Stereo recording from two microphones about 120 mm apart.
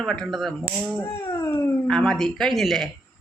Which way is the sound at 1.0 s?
20° left (ahead or behind).